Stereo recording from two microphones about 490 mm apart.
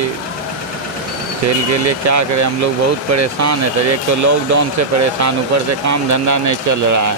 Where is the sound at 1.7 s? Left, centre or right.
Right.